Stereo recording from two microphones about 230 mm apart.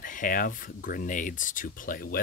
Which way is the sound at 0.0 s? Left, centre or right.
Left.